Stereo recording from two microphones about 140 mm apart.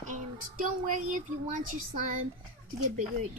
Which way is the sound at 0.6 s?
70° right (ahead or behind).